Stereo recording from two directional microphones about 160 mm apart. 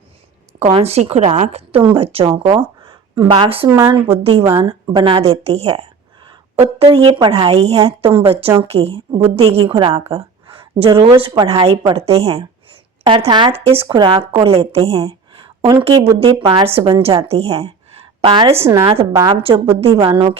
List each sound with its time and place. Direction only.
0.6 s a woman's voice: 40° right (ahead or behind)
1.8 s a woman's voice: 30° right (ahead or behind)
3.7 s a woman's voice: 15° right (ahead or behind)
4.2 s a woman's voice: 35° right (ahead or behind)
19.1 s a woman's voice: 20° right (ahead or behind)
19.4 s a woman's voice: 35° right (ahead or behind)